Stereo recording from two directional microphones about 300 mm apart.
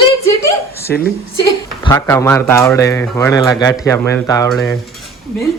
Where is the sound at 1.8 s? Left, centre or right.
Centre.